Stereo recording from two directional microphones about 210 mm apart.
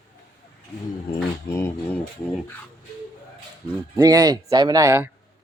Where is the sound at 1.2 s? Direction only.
10° left (ahead or behind).